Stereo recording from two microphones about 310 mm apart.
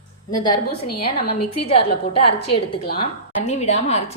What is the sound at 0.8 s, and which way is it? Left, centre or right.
Speech, left.